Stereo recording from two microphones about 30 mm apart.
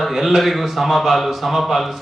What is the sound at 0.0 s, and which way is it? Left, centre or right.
Speech, centre.